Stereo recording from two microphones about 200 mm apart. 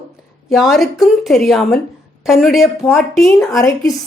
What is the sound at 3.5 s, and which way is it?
Speech, 15° left (ahead or behind).